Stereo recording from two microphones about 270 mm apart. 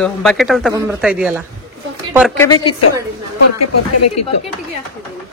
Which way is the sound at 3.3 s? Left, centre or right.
Left.